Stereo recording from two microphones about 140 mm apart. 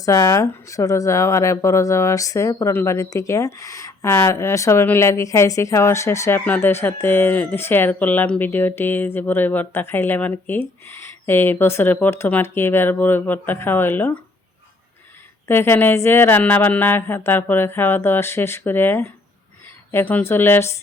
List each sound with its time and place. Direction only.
0.0 s speech: 25° left (ahead or behind)
15.4 s speech: 15° left (ahead or behind)